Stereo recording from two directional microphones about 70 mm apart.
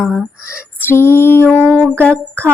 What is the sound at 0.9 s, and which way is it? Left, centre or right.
Female singing, left.